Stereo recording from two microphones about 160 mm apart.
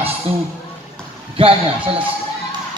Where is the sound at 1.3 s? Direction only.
35° right (ahead or behind).